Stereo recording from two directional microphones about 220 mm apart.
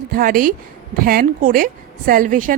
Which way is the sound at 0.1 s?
40° right (ahead or behind).